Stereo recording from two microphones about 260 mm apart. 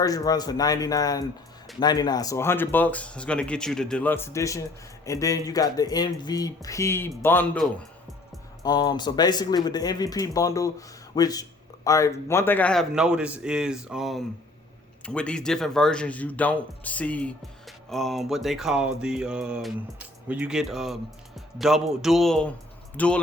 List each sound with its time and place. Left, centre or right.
0.0 s speech: centre